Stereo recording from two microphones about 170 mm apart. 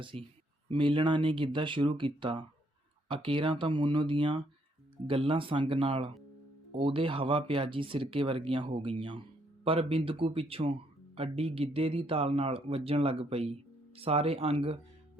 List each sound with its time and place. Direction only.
0.0 s speech: 30° right (ahead or behind)